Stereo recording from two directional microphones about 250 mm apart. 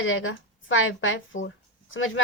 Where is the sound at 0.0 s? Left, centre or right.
Left.